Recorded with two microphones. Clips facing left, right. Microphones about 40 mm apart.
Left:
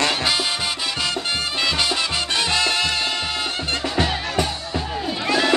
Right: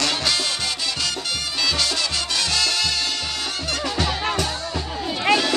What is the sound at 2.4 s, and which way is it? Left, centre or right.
Salsa music, left.